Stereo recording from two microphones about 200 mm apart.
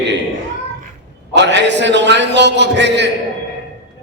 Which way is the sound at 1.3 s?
60° right (ahead or behind).